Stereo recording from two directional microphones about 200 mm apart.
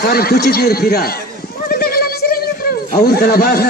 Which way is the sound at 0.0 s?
50° left (ahead or behind).